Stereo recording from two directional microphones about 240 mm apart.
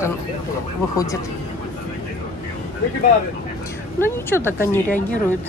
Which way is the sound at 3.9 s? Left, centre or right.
Centre.